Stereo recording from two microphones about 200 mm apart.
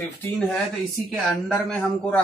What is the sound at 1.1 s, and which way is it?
A man's voice, centre (ahead or behind).